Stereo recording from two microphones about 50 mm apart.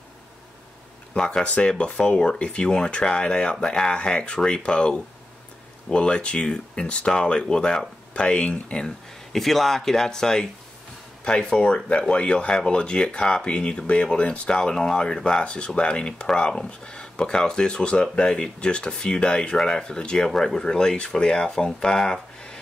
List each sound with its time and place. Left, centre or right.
1.1 s speech: centre
8.8 s speech: centre